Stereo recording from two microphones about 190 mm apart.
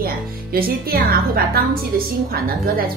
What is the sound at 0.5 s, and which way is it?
A woman's voice, 50° right (ahead or behind).